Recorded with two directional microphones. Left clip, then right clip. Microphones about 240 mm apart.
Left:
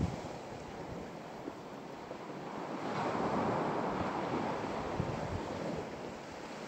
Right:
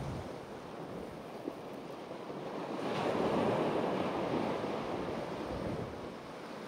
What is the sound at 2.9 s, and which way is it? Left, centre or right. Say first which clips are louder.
Waves: right 2 dB; right.